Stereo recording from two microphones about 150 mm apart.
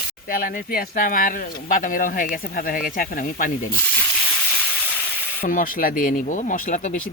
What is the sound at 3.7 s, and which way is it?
Frying, 15° left (ahead or behind).